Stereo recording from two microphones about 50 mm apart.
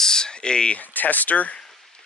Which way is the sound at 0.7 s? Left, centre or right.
Left.